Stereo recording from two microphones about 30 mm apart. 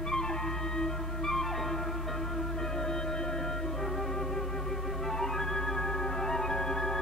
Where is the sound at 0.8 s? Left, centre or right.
Centre.